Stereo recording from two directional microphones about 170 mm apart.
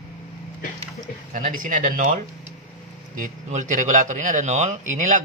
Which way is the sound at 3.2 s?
45° right (ahead or behind).